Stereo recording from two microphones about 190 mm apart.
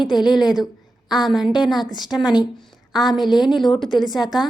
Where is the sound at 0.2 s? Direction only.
Centre (ahead or behind).